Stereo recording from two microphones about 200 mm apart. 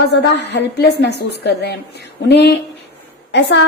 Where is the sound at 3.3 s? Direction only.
55° left (ahead or behind).